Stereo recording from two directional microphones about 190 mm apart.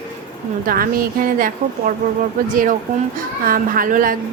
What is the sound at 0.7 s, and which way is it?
Speech, 50° right (ahead or behind).